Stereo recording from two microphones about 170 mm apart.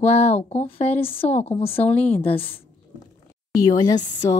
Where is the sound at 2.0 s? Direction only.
10° left (ahead or behind).